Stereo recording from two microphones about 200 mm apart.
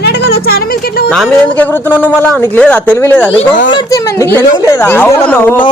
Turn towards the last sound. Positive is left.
turn(degrees=10)  # may be behind; listen again after turning